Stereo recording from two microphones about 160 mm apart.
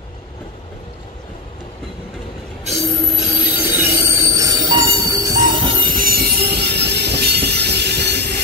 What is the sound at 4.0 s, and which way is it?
Train, 20° right (ahead or behind).